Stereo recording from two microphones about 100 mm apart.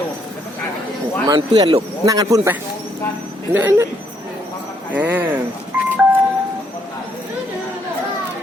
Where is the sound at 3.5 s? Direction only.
20° right (ahead or behind).